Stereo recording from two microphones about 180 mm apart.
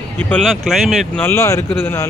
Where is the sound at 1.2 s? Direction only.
15° left (ahead or behind).